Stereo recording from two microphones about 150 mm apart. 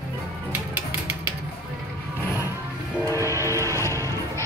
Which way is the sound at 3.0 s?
20° left (ahead or behind).